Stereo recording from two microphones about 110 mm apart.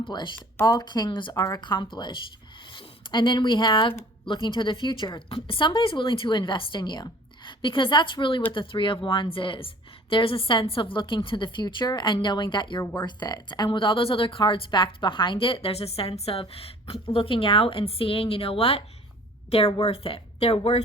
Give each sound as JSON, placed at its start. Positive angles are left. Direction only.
{"t": 0.0, "sound": "a woman's voice", "side_deg": 45}
{"t": 13.7, "sound": "a woman's voice", "side_deg": 50}